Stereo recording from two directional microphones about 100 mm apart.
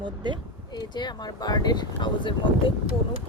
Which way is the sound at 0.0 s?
50° right (ahead or behind).